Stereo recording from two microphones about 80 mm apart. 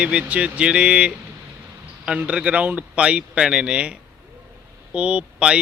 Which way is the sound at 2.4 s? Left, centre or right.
Centre.